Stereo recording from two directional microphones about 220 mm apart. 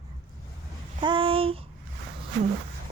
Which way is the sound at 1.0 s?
25° right (ahead or behind).